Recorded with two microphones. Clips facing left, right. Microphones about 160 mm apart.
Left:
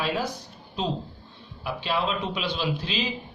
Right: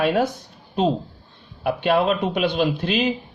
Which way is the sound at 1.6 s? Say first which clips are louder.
Right 8 dB; 60° right (ahead or behind).